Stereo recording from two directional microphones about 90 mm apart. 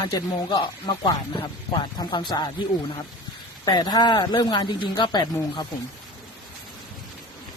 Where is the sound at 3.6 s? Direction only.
50° left (ahead or behind).